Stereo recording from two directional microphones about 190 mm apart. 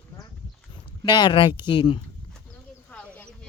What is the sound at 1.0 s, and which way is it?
Speech, 25° left (ahead or behind).